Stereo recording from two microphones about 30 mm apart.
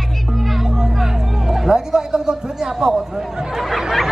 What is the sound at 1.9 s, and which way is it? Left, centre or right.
Speech, right.